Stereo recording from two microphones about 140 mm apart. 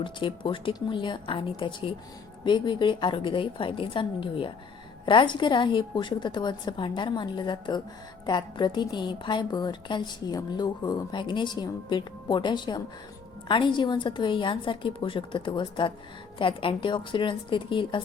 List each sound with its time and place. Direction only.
0.0 s a woman's voice: 35° left (ahead or behind)